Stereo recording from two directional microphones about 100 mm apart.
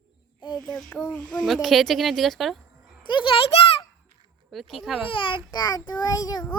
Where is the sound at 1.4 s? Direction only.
Centre (ahead or behind).